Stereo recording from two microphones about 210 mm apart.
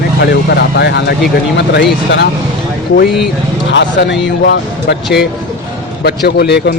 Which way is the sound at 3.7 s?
60° left (ahead or behind).